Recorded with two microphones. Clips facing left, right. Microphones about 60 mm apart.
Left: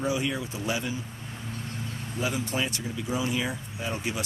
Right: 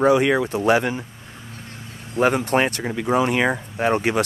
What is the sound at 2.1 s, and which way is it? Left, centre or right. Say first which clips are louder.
Speech: right 12 dB; right.